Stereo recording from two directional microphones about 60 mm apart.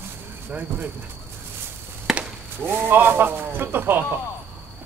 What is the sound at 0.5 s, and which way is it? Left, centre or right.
Speech, right.